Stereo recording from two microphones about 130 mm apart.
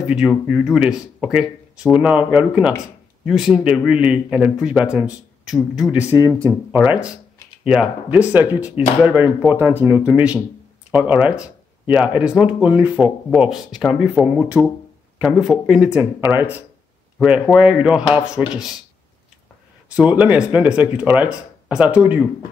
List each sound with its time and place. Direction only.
0.1 s speech: 5° right (ahead or behind)
6.1 s speech: 25° right (ahead or behind)
6.8 s speech: 10° right (ahead or behind)
18.4 s speech: 5° left (ahead or behind)
19.9 s speech: 10° right (ahead or behind)